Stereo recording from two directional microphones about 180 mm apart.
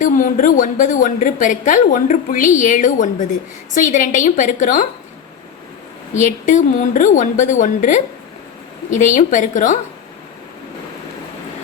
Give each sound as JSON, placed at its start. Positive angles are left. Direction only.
{"t": 0.0, "sound": "a woman's voice", "side_deg": 50}
{"t": 6.1, "sound": "a woman's voice", "side_deg": 45}